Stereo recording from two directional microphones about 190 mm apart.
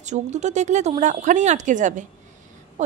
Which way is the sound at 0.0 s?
40° right (ahead or behind).